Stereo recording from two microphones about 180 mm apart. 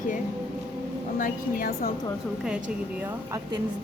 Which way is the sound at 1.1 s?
50° left (ahead or behind).